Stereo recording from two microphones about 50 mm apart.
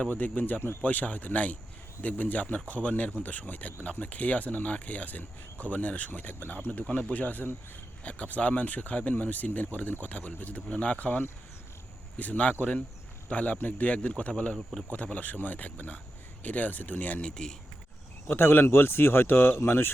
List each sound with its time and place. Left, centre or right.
0.1 s speech: left
6.8 s speech: centre
7.1 s speech: left
14.5 s speech: centre
14.8 s speech: left
17.2 s speech: centre
18.3 s speech: left